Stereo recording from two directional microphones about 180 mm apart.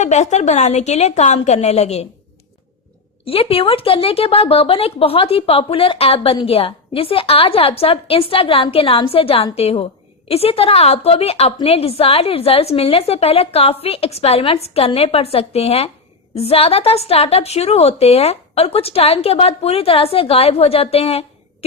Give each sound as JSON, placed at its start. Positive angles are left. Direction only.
{"t": 0.0, "sound": "speech", "side_deg": 40}
{"t": 3.2, "sound": "speech", "side_deg": 30}